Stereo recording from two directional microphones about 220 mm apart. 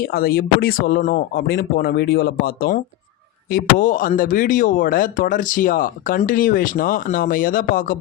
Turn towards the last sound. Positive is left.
turn(degrees=40)  # may be behind; listen again after turning